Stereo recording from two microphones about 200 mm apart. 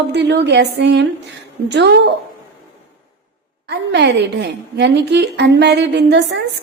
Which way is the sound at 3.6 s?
60° right (ahead or behind).